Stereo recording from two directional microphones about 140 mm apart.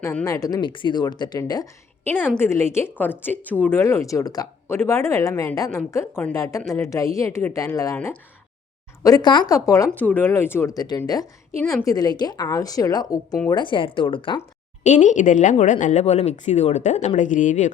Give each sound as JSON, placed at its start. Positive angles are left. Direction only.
{"t": 0.3, "sound": "a woman's voice", "side_deg": 25}
{"t": 2.0, "sound": "a woman's voice", "side_deg": 10}
{"t": 7.9, "sound": "a woman's voice", "side_deg": 10}
{"t": 9.0, "sound": "a woman's voice", "side_deg": 30}
{"t": 10.0, "sound": "a woman's voice", "side_deg": 10}
{"t": 14.8, "sound": "speech", "side_deg": 55}